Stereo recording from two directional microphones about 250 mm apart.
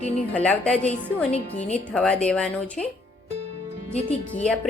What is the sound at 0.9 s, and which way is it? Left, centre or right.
Speech, left.